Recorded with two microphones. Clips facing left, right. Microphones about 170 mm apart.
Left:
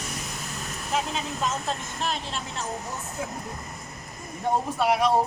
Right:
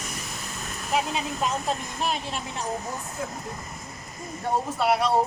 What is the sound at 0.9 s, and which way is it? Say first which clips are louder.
Speech: right 2 dB; 10° right (ahead or behind).